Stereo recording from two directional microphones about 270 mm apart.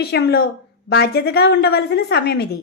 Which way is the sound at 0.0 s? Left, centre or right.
Left.